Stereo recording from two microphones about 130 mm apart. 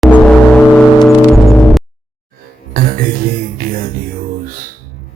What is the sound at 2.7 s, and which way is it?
Music, 90° right.